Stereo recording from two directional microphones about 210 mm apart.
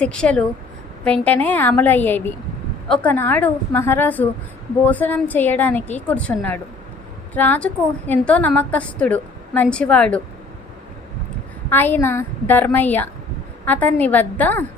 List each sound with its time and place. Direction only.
0.0 s a woman's voice: 5° left (ahead or behind)
11.7 s a woman's voice: 10° left (ahead or behind)